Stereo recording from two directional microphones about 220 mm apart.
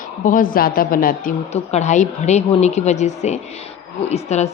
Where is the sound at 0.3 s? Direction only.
40° left (ahead or behind).